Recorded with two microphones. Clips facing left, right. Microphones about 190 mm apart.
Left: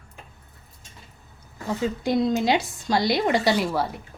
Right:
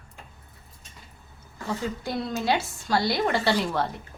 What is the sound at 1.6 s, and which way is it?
A woman's voice, 15° left (ahead or behind).